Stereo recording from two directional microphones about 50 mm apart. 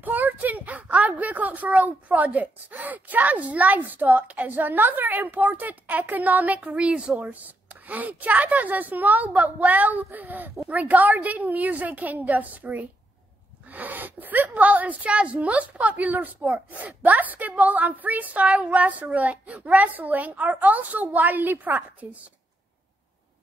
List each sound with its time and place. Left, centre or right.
0.0 s a child's voice: right